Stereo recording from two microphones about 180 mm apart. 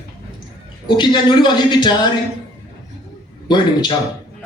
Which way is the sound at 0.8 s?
25° left (ahead or behind).